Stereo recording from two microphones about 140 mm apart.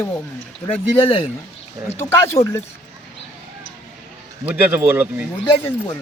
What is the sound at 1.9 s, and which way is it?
Speech, 15° left (ahead or behind).